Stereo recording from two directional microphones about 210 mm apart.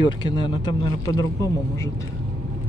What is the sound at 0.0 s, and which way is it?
Speech, 20° left (ahead or behind).